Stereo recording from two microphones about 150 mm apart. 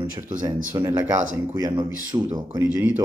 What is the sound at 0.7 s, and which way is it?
Speech, 15° right (ahead or behind).